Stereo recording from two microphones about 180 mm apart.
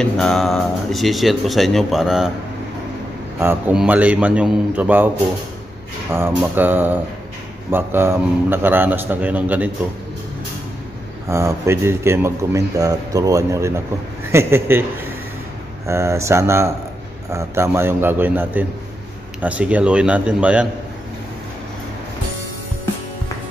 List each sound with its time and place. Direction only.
0.0 s speech: 5° left (ahead or behind)
3.3 s a man's voice: 10° right (ahead or behind)
6.1 s a man's voice: 10° right (ahead or behind)
11.2 s a man's voice: 15° right (ahead or behind)
15.9 s a man's voice: 15° right (ahead or behind)